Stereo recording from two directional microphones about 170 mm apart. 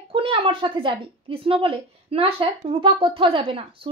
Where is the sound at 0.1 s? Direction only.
30° right (ahead or behind).